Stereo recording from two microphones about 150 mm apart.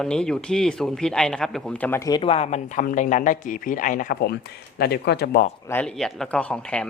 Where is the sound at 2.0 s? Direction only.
30° left (ahead or behind); by 4.3 s 80° left.